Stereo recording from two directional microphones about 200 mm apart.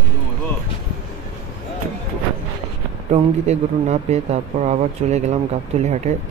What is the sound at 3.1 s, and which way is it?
Speech, 35° right (ahead or behind).